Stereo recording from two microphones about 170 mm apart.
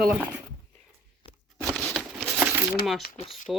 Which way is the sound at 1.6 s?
Centre (ahead or behind).